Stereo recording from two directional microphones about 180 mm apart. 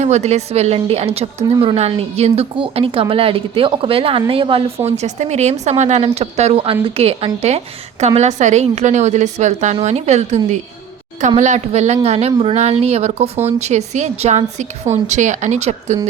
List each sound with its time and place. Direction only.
0.0 s a woman's voice: 40° right (ahead or behind)